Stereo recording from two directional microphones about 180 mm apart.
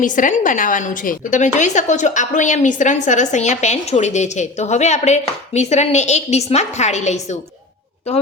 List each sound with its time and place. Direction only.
0.0 s a woman's voice: 45° left (ahead or behind)